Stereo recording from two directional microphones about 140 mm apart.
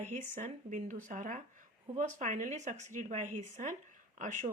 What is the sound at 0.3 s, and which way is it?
Speech, 55° right (ahead or behind).